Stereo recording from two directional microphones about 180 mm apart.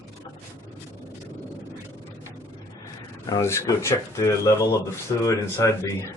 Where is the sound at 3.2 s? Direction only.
20° left (ahead or behind).